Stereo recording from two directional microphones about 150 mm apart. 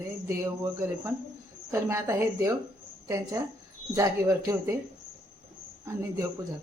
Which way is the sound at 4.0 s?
20° right (ahead or behind).